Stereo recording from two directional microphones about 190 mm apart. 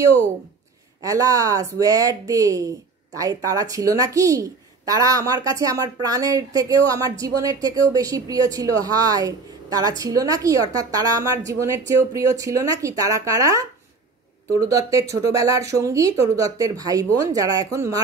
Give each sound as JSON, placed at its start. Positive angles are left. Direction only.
{"t": 1.0, "sound": "speech", "side_deg": -20}